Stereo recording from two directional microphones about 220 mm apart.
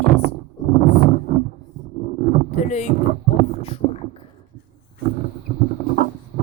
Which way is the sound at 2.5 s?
30° left (ahead or behind).